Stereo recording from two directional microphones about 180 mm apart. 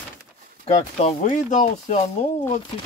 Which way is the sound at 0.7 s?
35° left (ahead or behind).